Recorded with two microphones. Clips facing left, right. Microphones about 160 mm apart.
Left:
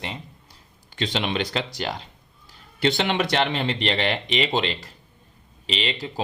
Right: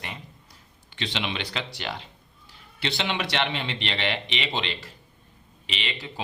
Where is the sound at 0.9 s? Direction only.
45° left (ahead or behind).